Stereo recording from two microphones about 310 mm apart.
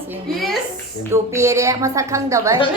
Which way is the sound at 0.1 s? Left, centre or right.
Centre.